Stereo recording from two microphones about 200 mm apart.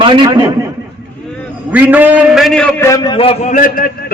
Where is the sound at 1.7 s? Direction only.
10° right (ahead or behind).